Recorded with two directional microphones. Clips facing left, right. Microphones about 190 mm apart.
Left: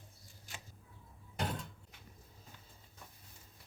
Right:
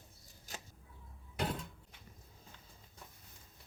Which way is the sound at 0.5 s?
40° right (ahead or behind).